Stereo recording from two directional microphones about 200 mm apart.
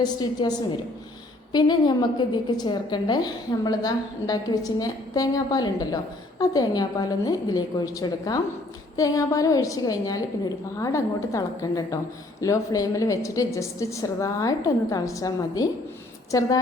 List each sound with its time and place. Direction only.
0.0 s a woman's voice: 20° left (ahead or behind)
1.5 s a woman's voice: 20° left (ahead or behind)